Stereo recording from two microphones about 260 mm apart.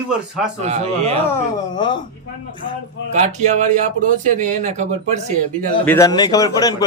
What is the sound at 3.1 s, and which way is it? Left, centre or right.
Speech, right.